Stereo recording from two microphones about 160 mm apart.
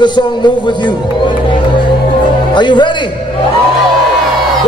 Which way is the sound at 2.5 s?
30° left (ahead or behind).